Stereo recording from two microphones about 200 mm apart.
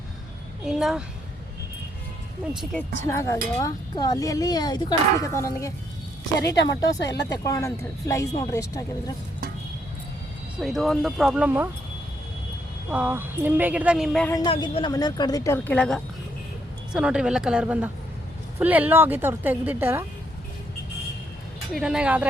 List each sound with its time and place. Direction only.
0.6 s speech: centre (ahead or behind)
3.0 s speech: 15° left (ahead or behind)
7.0 s speech: 60° left (ahead or behind)
7.3 s speech: 15° left (ahead or behind)
10.6 s speech: centre (ahead or behind)
12.9 s a woman's voice: 10° right (ahead or behind)
14.3 s a woman's voice: 20° left (ahead or behind); by 20.1 s 10° right (ahead or behind)
21.8 s speech: 5° right (ahead or behind)